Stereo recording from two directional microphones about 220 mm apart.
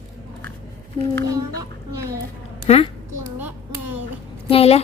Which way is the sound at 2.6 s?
30° left (ahead or behind).